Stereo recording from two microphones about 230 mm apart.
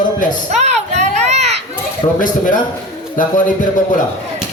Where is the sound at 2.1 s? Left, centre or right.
Left.